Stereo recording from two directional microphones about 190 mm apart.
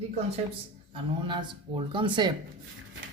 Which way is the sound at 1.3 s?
25° right (ahead or behind).